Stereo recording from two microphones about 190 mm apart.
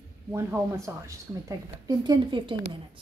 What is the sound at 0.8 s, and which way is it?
A woman's voice, 15° right (ahead or behind).